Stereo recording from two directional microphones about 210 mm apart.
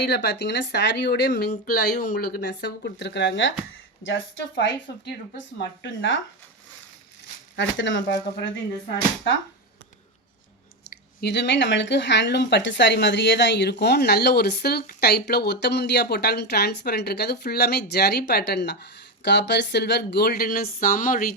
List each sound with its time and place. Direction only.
0.0 s a woman's voice: 50° left (ahead or behind)
7.5 s a woman's voice: 60° left (ahead or behind)
10.8 s speech: 50° left (ahead or behind)